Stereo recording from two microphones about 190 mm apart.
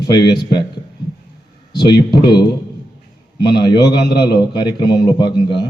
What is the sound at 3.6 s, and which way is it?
A man's voice, 25° left (ahead or behind).